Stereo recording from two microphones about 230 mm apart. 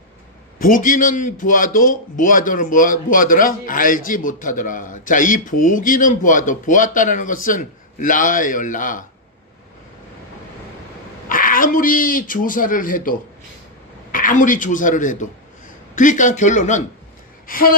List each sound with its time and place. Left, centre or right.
0.6 s a man's voice: left
11.3 s a man's voice: left
17.4 s a sound: left